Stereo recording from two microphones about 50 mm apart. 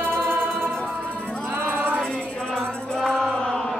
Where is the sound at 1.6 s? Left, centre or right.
Right.